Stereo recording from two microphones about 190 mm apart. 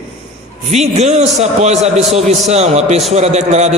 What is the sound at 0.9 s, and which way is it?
A man's voice, 35° right (ahead or behind).